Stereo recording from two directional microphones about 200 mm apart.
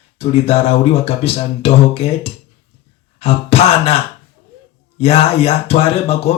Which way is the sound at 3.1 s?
30° left (ahead or behind).